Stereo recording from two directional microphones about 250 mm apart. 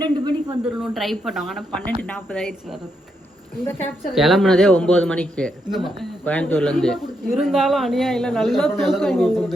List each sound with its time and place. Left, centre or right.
0.0 s a sound: centre
0.6 s speech: centre
4.1 s speech: centre